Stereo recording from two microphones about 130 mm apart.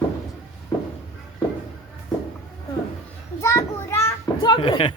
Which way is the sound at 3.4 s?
20° left (ahead or behind).